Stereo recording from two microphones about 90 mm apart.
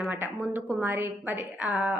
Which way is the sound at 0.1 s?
20° right (ahead or behind).